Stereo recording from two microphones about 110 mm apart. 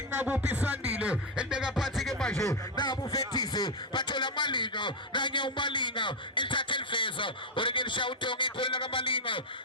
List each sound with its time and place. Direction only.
0.2 s music: 15° right (ahead or behind); by 2.3 s 5° left (ahead or behind)
2.4 s beatboxing: 35° left (ahead or behind)